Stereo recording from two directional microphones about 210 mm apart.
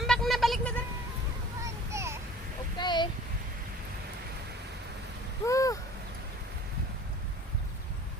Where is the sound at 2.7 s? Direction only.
20° left (ahead or behind).